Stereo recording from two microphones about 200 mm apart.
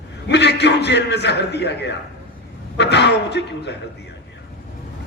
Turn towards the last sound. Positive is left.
turn(degrees=60)  # may be behind; listen again after turning